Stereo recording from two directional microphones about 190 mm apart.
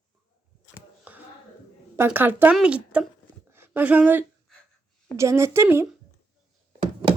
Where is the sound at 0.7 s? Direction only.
10° right (ahead or behind).